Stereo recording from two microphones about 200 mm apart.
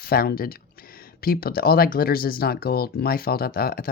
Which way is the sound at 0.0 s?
50° left (ahead or behind).